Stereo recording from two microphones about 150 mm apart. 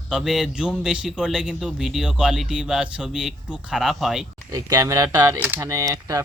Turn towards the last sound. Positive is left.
turn(degrees=-20)  # may be behind; listen again after turning